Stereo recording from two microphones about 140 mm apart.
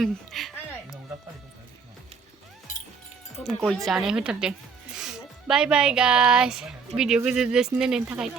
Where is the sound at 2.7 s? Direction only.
70° left (ahead or behind).